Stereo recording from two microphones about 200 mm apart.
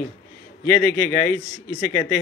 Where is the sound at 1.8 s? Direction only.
40° left (ahead or behind).